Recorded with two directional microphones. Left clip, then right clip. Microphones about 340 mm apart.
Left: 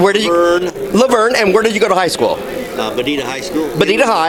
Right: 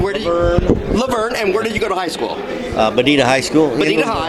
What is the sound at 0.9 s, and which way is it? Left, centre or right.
Speech, left.